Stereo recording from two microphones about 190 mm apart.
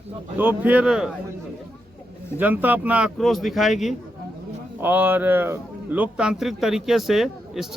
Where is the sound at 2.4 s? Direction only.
10° right (ahead or behind).